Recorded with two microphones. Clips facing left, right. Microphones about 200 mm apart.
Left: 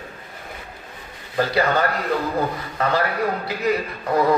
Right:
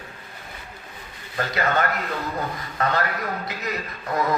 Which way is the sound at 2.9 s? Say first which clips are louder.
Left 7 dB; 30° left (ahead or behind).